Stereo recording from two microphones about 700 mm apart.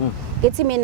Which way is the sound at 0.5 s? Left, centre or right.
Right.